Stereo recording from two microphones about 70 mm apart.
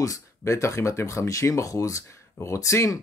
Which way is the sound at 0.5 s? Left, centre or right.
Left.